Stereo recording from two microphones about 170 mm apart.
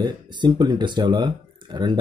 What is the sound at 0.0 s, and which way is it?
A man's voice, 25° right (ahead or behind).